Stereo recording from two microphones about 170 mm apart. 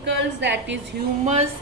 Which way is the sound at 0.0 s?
90° right.